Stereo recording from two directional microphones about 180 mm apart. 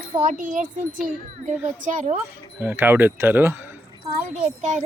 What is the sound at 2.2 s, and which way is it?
Speech, 10° right (ahead or behind).